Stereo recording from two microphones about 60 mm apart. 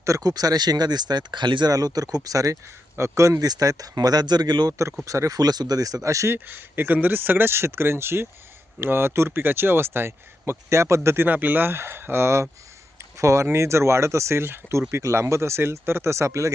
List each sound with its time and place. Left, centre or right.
0.0 s speech: right
2.1 s speech: right
3.0 s speech: right
5.0 s speech: right
6.3 s speech: right
11.3 s speech: right